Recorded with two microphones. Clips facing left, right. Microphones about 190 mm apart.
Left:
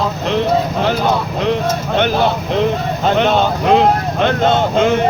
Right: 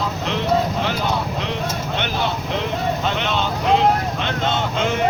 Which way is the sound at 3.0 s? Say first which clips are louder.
Left 8 dB; 45° left (ahead or behind).